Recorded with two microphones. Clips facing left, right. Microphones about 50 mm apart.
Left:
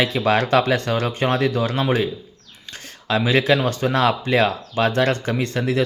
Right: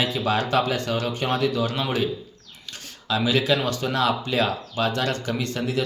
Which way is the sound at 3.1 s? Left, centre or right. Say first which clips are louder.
Left 4 dB; left.